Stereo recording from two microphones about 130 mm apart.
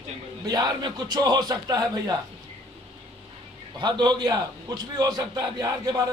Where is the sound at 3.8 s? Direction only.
35° right (ahead or behind).